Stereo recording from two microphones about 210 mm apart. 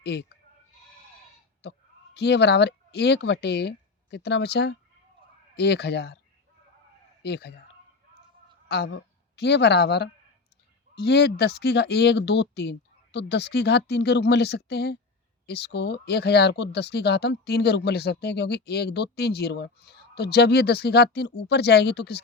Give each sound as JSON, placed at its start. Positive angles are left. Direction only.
{"t": 0.0, "sound": "speech", "side_deg": 50}
{"t": 1.6, "sound": "speech", "side_deg": 55}
{"t": 7.2, "sound": "speech", "side_deg": 50}
{"t": 8.7, "sound": "speech", "side_deg": 50}